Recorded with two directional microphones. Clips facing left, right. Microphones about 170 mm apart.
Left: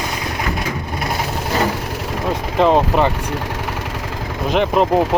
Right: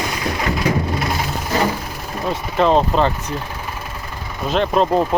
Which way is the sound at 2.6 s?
15° left (ahead or behind).